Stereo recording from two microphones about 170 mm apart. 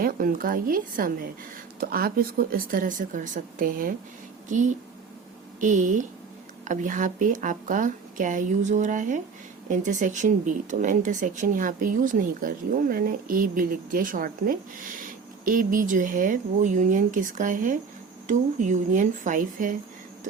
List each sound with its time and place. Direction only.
0.0 s a woman's voice: 55° right (ahead or behind)